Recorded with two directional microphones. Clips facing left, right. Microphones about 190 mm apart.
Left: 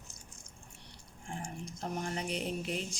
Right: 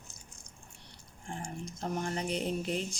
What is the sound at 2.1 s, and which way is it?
Mantra, 40° right (ahead or behind).